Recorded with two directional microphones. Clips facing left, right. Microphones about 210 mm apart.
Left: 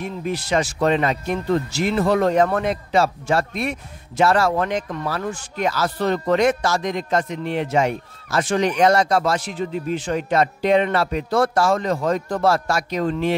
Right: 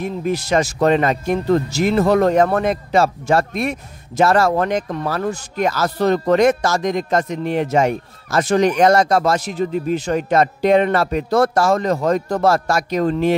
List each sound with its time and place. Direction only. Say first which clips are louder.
0.0 s speech: right 5 dB; 45° right (ahead or behind)